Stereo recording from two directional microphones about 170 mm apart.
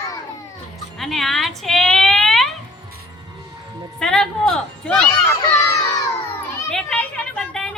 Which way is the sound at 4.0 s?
5° left (ahead or behind).